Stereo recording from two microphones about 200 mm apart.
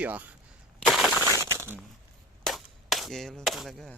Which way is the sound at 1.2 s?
15° right (ahead or behind).